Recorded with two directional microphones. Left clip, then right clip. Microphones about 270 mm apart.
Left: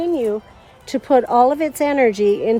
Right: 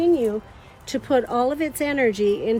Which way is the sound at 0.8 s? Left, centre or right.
Left.